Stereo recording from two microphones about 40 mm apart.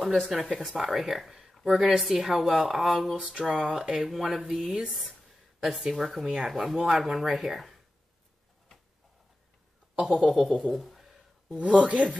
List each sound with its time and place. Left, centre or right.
0.0 s speech: centre
10.5 s speech: centre
11.5 s speech: right